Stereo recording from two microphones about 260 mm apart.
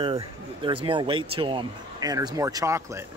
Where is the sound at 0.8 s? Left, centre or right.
Centre.